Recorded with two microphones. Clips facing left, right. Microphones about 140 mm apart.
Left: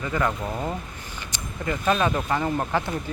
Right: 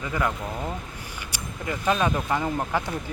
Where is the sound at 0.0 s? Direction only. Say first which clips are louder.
Left 2 dB; 10° right (ahead or behind).